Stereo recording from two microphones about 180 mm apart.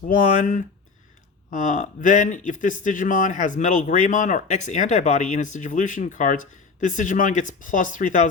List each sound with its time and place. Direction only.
0.1 s a man's voice: 45° left (ahead or behind)